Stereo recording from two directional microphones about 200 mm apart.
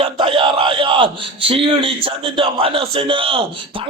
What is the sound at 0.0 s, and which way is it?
A man's voice, 25° right (ahead or behind).